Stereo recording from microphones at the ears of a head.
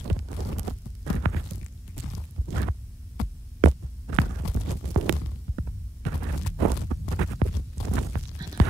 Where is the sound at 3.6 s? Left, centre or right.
Right.